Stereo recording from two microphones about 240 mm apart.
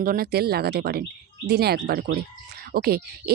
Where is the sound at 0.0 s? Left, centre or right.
Right.